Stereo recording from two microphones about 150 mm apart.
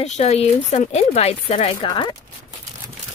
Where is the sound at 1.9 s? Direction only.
30° left (ahead or behind).